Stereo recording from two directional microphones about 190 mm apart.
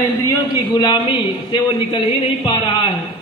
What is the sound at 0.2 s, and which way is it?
A man's voice, 20° left (ahead or behind).